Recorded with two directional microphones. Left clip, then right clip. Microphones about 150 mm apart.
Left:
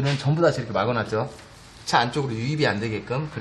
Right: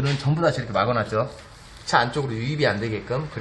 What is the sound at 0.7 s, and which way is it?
Speech, 15° left (ahead or behind).